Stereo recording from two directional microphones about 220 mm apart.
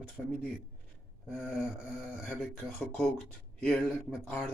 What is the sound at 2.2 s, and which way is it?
Speech, 5° left (ahead or behind).